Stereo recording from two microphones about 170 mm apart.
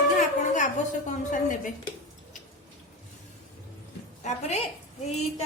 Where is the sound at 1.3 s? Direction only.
45° left (ahead or behind).